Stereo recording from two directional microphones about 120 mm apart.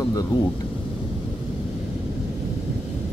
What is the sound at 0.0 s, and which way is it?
Thunder, 30° left (ahead or behind).